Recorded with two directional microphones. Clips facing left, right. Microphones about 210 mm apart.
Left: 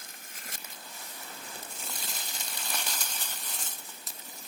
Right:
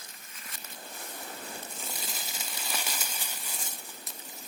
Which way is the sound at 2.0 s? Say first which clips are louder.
Right 2 dB; 5° right (ahead or behind).